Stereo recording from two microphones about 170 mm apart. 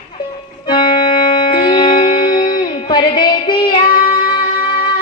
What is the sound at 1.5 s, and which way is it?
Music, 30° left (ahead or behind).